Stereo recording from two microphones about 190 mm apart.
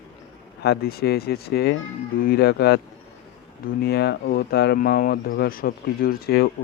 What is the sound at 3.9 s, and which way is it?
Speech, 60° left (ahead or behind).